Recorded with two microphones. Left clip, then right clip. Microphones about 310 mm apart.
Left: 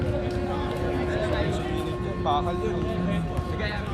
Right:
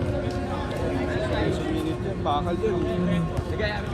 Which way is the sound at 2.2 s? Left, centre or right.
Left.